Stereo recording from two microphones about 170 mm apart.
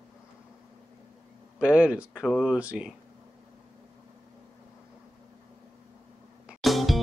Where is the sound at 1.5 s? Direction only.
5° right (ahead or behind).